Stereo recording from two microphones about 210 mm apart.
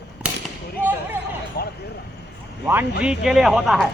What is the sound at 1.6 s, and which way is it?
Speech, 50° left (ahead or behind).